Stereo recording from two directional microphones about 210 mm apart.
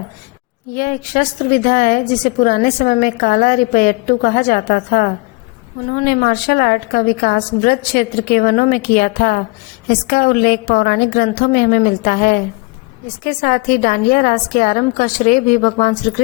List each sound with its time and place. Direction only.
0.8 s a woman's voice: 40° left (ahead or behind)